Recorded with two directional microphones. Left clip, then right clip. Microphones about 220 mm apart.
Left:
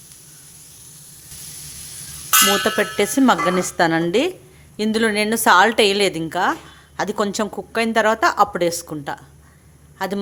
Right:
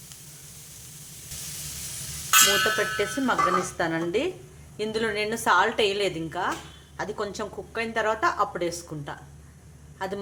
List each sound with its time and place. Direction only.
2.7 s a woman's voice: 50° left (ahead or behind)